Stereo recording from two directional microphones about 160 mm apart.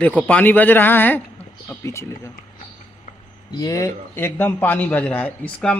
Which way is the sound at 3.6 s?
20° left (ahead or behind).